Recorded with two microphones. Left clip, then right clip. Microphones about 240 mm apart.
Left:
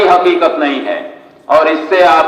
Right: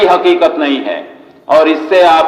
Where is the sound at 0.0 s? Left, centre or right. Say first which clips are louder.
Even; right.